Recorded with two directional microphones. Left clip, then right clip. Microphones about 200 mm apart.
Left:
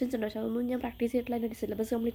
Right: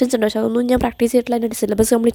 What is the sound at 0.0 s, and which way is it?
A woman's voice, 45° right (ahead or behind).